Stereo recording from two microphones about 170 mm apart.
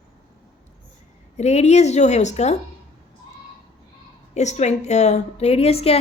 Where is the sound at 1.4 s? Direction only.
40° left (ahead or behind).